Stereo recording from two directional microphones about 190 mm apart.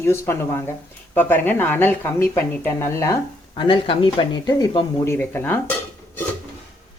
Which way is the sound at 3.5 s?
25° left (ahead or behind).